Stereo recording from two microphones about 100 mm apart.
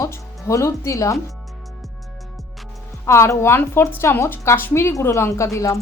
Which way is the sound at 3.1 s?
30° left (ahead or behind).